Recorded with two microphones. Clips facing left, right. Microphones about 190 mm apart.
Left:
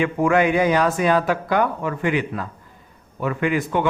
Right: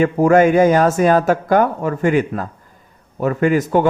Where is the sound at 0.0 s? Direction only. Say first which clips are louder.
Right 6 dB; 40° right (ahead or behind).